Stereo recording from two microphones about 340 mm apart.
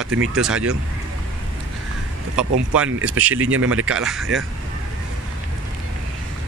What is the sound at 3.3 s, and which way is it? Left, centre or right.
Speech, right.